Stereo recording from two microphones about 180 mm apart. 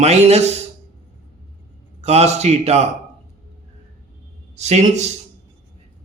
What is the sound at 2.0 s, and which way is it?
Speech, 35° right (ahead or behind).